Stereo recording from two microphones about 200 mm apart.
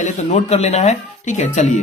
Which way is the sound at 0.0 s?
35° left (ahead or behind).